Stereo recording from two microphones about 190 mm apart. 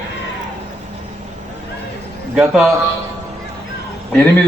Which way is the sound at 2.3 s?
5° right (ahead or behind).